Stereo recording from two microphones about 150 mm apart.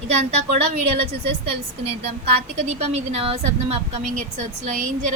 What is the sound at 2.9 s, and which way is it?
A woman's voice, 45° right (ahead or behind).